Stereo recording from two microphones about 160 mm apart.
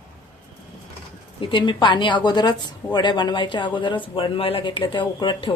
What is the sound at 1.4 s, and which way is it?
A woman's voice, 30° left (ahead or behind).